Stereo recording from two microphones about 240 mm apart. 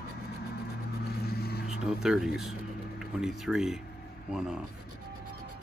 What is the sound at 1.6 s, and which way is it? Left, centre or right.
Speech, centre.